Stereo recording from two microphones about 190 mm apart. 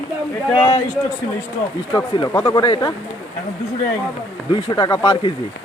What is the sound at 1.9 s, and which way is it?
Speech, 15° left (ahead or behind).